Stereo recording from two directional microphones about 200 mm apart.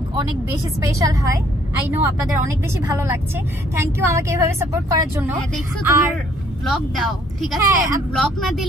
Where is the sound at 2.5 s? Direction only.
15° right (ahead or behind).